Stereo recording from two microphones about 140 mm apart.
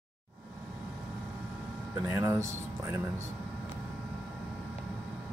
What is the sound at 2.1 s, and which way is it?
Speech, 20° right (ahead or behind).